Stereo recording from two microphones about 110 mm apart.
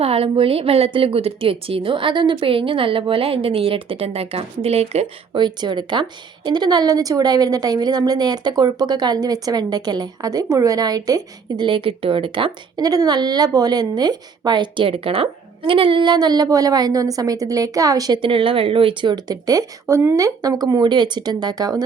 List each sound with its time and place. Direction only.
0.0 s a woman's voice: 60° right (ahead or behind)
5.3 s a woman's voice: 45° right (ahead or behind)
11.6 s speech: 50° right (ahead or behind)
12.8 s a woman's voice: 35° right (ahead or behind)
18.2 s a woman's voice: 55° right (ahead or behind); by 21.8 s 35° right (ahead or behind)